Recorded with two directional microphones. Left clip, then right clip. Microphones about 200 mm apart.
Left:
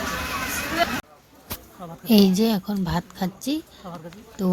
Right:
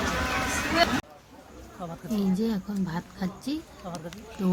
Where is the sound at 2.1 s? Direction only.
50° left (ahead or behind).